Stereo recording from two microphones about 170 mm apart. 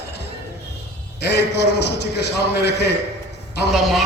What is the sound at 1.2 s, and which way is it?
A man's voice, 75° left (ahead or behind).